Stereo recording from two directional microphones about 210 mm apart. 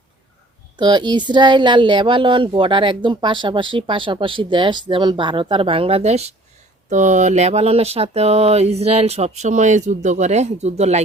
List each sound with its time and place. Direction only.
0.8 s speech: 20° right (ahead or behind)